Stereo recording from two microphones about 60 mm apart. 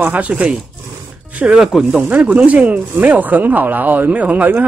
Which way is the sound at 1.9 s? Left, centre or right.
Right.